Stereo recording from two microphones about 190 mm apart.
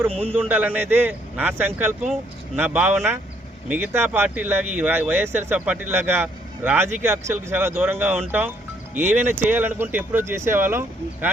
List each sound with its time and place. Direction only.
0.1 s a man's voice: 30° right (ahead or behind)
0.3 s speech: 10° right (ahead or behind)